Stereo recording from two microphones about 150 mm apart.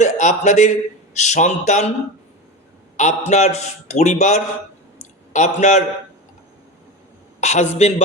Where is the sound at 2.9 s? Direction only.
50° left (ahead or behind).